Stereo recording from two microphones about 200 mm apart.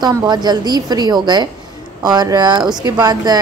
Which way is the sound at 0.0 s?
20° right (ahead or behind).